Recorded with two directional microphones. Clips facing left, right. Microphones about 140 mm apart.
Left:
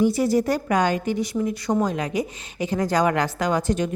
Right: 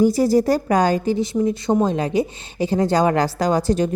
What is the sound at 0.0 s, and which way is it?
Speech, 35° right (ahead or behind).